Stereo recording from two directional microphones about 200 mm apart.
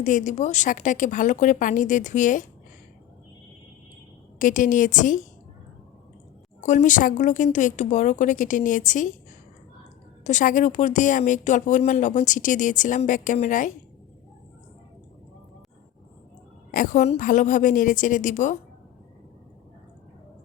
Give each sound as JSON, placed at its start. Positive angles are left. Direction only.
{"t": 0.0, "sound": "a woman's voice", "side_deg": 40}
{"t": 4.4, "sound": "a woman's voice", "side_deg": 40}
{"t": 6.6, "sound": "a woman's voice", "side_deg": 40}
{"t": 10.2, "sound": "a woman's voice", "side_deg": 40}
{"t": 16.7, "sound": "a woman's voice", "side_deg": 40}